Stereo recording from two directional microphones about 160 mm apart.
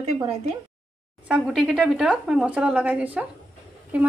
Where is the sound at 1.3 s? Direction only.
5° right (ahead or behind).